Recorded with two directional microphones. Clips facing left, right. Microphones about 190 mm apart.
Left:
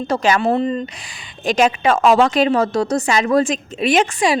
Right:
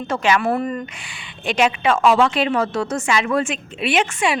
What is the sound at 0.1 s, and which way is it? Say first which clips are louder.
Speech: left 2 dB; 35° left (ahead or behind).